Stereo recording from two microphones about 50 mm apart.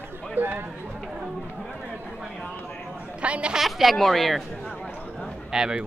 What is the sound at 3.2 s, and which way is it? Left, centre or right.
Speech, right.